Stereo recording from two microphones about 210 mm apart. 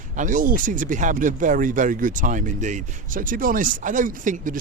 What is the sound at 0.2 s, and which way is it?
Speech, 40° right (ahead or behind).